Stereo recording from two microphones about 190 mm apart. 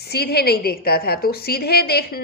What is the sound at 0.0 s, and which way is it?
A woman's voice, 55° left (ahead or behind).